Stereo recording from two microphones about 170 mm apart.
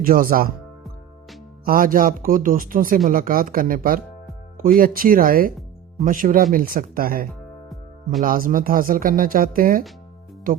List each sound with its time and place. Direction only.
0.0 s speech: 55° right (ahead or behind)
1.6 s speech: 55° right (ahead or behind)